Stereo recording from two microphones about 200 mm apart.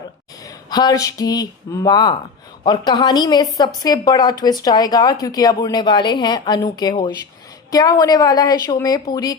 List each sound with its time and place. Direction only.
0.4 s a woman's voice: 20° left (ahead or behind)